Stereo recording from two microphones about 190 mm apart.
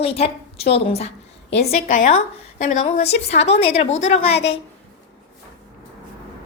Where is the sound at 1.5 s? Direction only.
65° left (ahead or behind).